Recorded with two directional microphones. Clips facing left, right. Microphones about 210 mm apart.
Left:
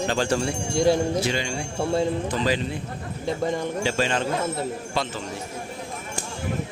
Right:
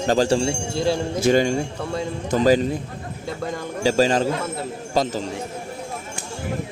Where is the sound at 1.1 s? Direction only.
45° right (ahead or behind).